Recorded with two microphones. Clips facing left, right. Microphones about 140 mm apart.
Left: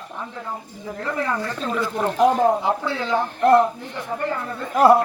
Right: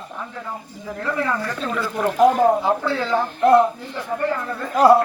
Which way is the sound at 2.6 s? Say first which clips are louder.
Right 2 dB; 20° left (ahead or behind).